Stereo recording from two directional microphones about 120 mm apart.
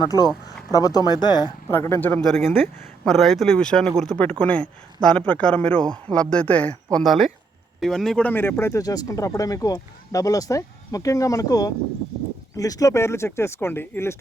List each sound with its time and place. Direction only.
0.0 s speech: 35° left (ahead or behind)
1.6 s speech: 20° left (ahead or behind)
3.0 s speech: centre (ahead or behind)
7.0 s speech: centre (ahead or behind); by 14.2 s 20° left (ahead or behind)